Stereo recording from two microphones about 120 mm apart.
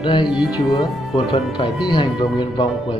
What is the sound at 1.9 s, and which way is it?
Speech, 40° left (ahead or behind).